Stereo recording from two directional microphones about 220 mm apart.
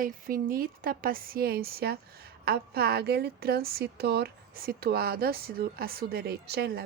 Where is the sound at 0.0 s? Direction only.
40° right (ahead or behind).